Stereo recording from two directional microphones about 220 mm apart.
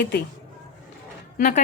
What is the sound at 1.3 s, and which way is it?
Speech, 35° left (ahead or behind).